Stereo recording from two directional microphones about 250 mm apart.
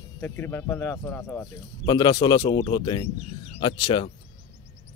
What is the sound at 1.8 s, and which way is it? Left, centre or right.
Speech, centre.